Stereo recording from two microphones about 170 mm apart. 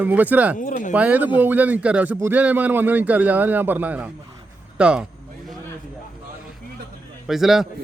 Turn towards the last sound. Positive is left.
turn(degrees=0)  # may be behind; listen again after turning